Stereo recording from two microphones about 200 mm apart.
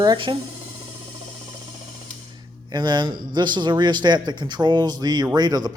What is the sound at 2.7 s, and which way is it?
A man's voice, 20° right (ahead or behind).